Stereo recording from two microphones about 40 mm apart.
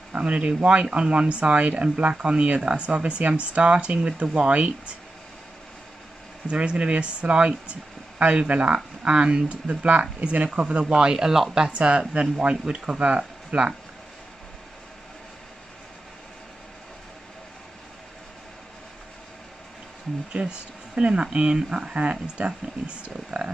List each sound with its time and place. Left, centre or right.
0.1 s speech: right
4.5 s speech: right
6.4 s speech: right
11.7 s speech: right
20.3 s speech: right
22.4 s speech: right